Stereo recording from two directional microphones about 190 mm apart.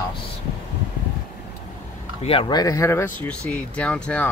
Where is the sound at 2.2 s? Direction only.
25° left (ahead or behind).